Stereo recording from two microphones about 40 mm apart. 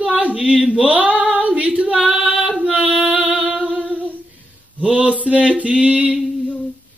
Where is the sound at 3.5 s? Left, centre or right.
Right.